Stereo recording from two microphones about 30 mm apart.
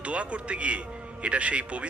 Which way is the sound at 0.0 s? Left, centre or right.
Right.